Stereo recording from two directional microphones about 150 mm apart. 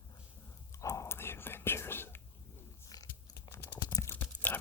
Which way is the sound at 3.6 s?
90° left.